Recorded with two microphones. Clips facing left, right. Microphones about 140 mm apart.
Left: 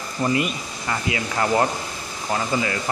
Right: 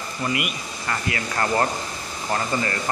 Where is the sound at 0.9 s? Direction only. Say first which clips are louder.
Left 2 dB; 15° left (ahead or behind).